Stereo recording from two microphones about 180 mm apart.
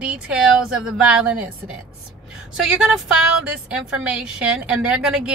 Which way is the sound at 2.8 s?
Centre (ahead or behind).